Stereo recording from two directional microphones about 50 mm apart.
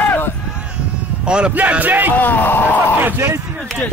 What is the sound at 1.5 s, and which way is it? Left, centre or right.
Speech, right.